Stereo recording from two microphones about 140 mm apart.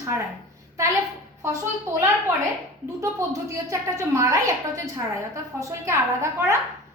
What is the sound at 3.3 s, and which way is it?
A woman's voice, 25° right (ahead or behind).